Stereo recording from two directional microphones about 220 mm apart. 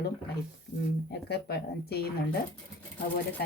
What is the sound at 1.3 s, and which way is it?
Speech, 45° left (ahead or behind).